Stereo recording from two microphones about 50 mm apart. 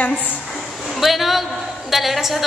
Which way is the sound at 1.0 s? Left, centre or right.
Centre.